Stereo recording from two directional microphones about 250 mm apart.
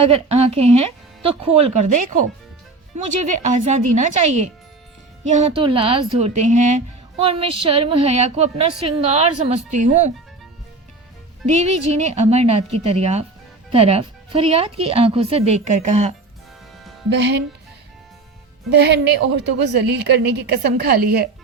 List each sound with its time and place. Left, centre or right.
0.0 s a woman's voice: right
3.2 s a woman's voice: right
11.5 s a woman's voice: right
17.1 s speech: right
18.7 s a woman's voice: right